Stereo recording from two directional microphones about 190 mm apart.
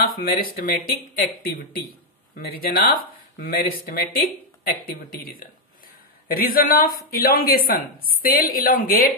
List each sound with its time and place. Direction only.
0.0 s speech: 50° left (ahead or behind)